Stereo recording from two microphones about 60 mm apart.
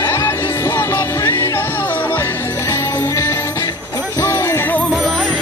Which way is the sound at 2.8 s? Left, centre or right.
Left.